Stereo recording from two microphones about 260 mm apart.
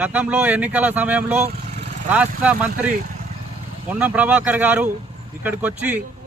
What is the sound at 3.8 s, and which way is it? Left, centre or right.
Speech, centre.